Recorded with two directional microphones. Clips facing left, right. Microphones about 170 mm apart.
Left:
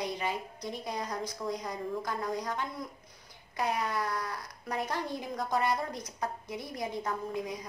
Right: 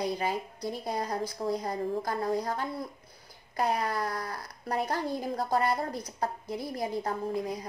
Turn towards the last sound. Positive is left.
turn(degrees=-35)  # may be behind; listen again after turning